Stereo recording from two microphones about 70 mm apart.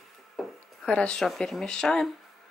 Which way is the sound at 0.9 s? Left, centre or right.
Centre.